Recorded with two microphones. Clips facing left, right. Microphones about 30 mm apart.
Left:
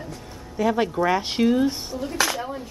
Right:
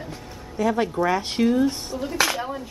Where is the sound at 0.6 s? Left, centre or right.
Centre.